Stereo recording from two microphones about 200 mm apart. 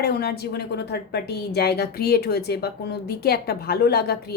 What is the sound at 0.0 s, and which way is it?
A woman's voice, 55° left (ahead or behind).